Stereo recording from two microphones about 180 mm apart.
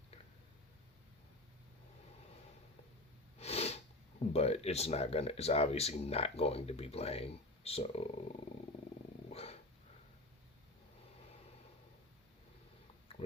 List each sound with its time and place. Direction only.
3.3 s sneeze: 35° left (ahead or behind)
4.3 s speech: 35° left (ahead or behind)
9.3 s dog: 35° left (ahead or behind)